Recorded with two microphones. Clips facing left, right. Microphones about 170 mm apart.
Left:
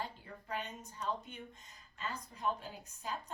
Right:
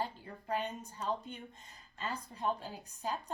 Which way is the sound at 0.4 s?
30° right (ahead or behind).